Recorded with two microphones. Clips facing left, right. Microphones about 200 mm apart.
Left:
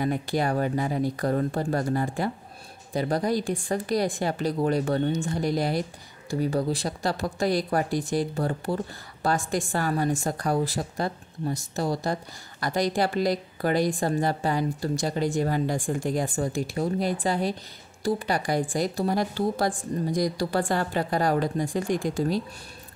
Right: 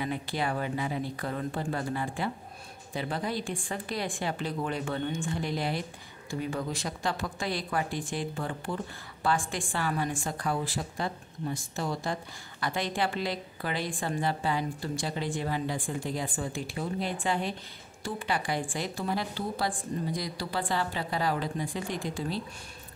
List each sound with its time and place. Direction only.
0.0 s a woman's voice: 45° left (ahead or behind)